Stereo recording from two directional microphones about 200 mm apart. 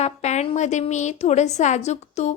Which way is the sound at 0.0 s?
35° left (ahead or behind).